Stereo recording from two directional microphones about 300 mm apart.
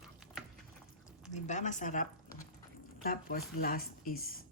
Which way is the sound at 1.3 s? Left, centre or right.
Left.